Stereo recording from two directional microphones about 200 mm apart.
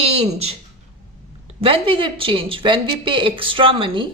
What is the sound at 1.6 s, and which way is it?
Speech, 25° right (ahead or behind).